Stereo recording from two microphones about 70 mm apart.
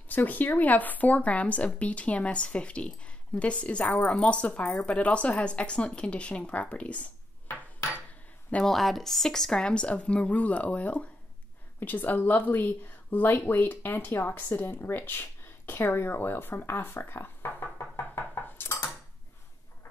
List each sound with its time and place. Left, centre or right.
0.1 s speech: left
8.6 s speech: centre; by 18.8 s left